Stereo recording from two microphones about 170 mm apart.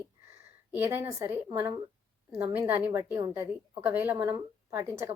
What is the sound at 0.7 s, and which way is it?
A woman's voice, 15° right (ahead or behind).